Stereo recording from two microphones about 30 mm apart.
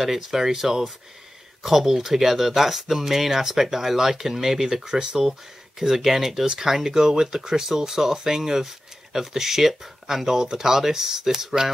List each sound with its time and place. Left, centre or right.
0.0 s speech: centre
4.9 s speech: right
5.8 s speech: centre